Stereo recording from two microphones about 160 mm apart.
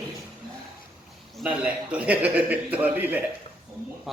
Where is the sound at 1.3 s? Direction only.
5° right (ahead or behind).